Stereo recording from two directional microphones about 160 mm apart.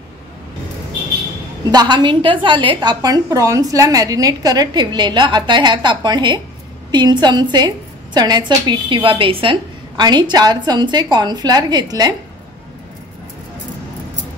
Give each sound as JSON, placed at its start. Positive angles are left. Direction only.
{"t": 1.7, "sound": "a woman's voice", "side_deg": -25}